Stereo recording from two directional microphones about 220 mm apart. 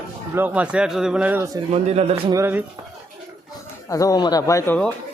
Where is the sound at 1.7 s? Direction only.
30° right (ahead or behind).